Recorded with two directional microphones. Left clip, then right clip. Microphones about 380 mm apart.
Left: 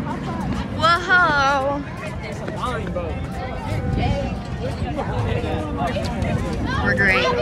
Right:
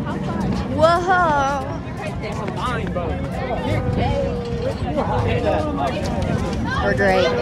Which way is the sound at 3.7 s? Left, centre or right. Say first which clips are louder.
Right 3 dB; right.